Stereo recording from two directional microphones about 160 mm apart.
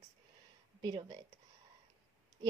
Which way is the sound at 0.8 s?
25° right (ahead or behind).